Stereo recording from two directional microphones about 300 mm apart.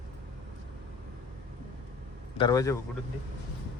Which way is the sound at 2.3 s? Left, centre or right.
Centre.